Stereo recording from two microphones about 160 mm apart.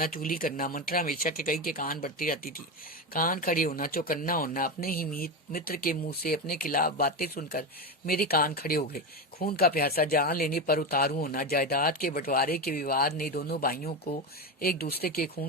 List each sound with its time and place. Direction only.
0.0 s speech: 60° left (ahead or behind)